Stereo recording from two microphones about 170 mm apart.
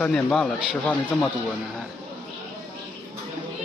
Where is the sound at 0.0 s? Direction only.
5° left (ahead or behind).